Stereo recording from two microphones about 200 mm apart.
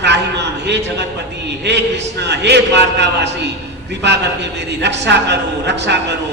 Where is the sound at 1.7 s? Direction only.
60° right (ahead or behind).